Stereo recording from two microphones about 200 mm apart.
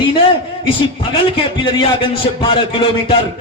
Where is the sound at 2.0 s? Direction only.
25° left (ahead or behind).